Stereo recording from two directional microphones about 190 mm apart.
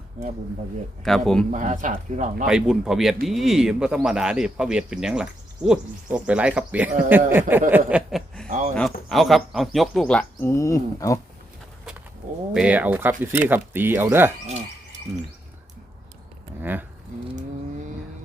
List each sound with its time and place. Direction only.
1.0 s speech: centre (ahead or behind)
1.5 s a man's voice: 40° right (ahead or behind)
2.5 s speech: 5° right (ahead or behind)
7.7 s chuckle: 5° right (ahead or behind)
8.4 s a sound: 40° right (ahead or behind)
8.7 s speech: centre (ahead or behind); by 11.2 s 15° left (ahead or behind)
12.5 s speech: 5° right (ahead or behind)
16.6 s speech: 10° right (ahead or behind)